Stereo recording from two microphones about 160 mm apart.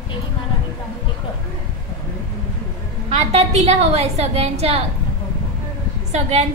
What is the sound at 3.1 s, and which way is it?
A woman's voice, 40° right (ahead or behind).